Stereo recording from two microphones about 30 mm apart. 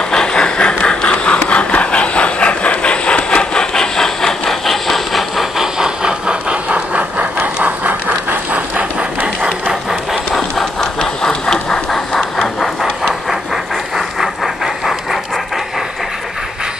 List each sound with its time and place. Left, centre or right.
0.1 s a sound: left
3.7 s vehicle: centre
5.4 s vehicle: centre
6.5 s a sound: right
7.6 s vehicle: right
8.5 s train: right
10.8 s engine: left
12.5 s vehicle: centre
13.9 s vehicle: centre